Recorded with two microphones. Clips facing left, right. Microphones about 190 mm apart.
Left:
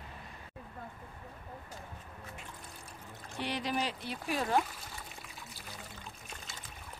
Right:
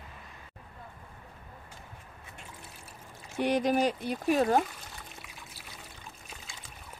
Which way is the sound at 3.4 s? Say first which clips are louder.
Right 9 dB; 45° right (ahead or behind).